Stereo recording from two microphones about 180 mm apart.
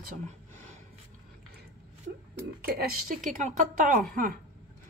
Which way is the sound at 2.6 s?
55° right (ahead or behind).